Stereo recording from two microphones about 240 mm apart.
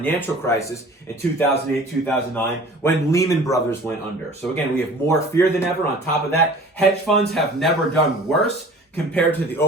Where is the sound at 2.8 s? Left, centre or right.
Centre.